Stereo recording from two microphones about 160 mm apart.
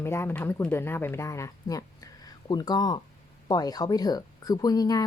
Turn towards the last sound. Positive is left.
turn(degrees=25)  # may be behind; listen again after turning